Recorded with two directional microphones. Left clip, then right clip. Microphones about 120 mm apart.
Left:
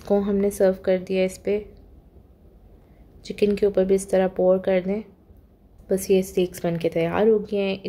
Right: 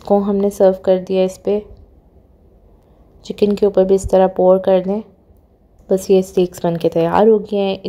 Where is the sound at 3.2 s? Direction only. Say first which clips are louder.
Right 6 dB; 30° right (ahead or behind).